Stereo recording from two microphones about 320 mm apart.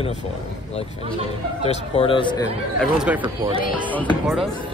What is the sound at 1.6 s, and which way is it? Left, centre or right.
Speech, centre.